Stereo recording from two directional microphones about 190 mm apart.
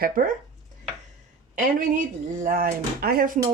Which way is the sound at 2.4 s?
50° right (ahead or behind).